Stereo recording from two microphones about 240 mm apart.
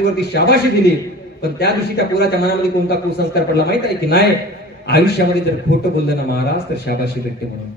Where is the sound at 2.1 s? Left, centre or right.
Left.